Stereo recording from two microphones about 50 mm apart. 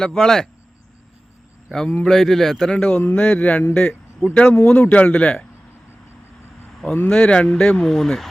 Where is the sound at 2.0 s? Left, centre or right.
Centre; by 3.6 s left.